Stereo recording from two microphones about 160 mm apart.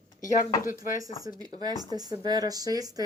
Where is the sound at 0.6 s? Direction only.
60° left (ahead or behind).